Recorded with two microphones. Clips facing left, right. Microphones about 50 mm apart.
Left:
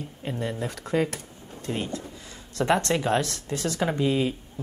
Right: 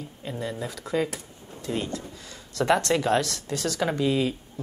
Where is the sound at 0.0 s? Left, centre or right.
Left.